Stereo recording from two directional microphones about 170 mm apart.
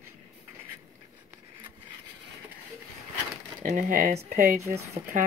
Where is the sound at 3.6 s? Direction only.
50° right (ahead or behind).